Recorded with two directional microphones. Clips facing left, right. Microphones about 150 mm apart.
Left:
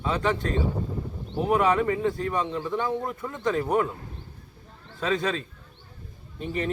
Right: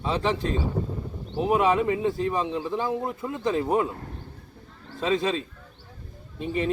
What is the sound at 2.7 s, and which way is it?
Speech, 5° right (ahead or behind).